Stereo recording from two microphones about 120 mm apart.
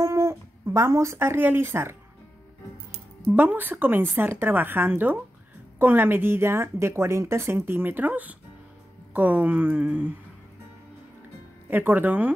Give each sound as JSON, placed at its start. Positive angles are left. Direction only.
{"t": 0.0, "sound": "speech", "side_deg": -25}
{"t": 3.3, "sound": "a woman's voice", "side_deg": -15}
{"t": 11.7, "sound": "a woman's voice", "side_deg": -15}